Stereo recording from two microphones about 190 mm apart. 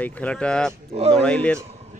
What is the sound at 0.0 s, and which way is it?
Speech, 5° left (ahead or behind).